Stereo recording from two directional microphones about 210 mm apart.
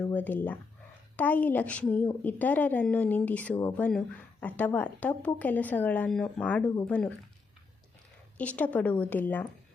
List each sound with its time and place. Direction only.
0.1 s a woman's voice: 10° left (ahead or behind)
8.4 s a woman's voice: 5° left (ahead or behind)